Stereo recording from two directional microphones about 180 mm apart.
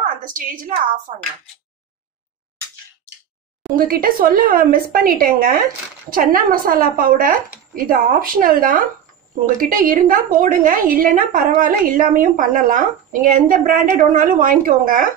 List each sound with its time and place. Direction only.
0.0 s a woman's voice: 50° right (ahead or behind)
3.7 s a woman's voice: 50° right (ahead or behind)